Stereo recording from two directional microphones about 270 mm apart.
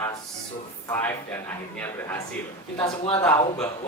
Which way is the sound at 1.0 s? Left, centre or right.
Centre.